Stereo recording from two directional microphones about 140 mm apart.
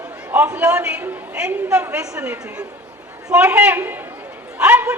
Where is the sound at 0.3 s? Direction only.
10° right (ahead or behind).